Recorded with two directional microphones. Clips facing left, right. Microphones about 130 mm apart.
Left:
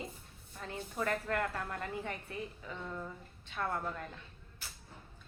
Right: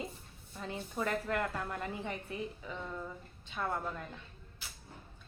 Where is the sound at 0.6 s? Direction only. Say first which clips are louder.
Right 1 dB; 15° right (ahead or behind).